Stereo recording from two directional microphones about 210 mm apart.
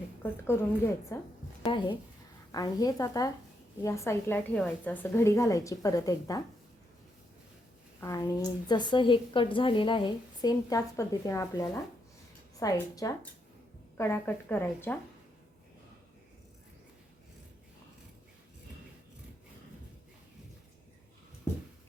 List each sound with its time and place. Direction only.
0.2 s a woman's voice: 10° left (ahead or behind)
8.0 s a woman's voice: 15° left (ahead or behind)